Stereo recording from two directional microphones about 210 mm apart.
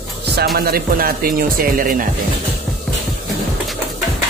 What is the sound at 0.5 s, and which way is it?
Speech, 45° right (ahead or behind).